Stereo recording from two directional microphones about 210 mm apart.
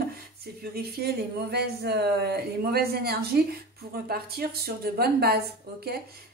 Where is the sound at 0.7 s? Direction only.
50° right (ahead or behind).